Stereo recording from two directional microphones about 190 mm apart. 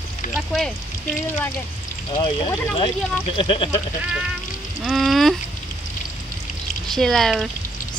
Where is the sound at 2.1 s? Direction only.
25° left (ahead or behind).